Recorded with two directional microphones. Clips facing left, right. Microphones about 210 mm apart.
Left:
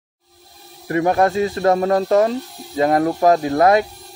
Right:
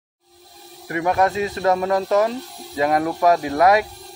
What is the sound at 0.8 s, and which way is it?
Speech, 30° left (ahead or behind).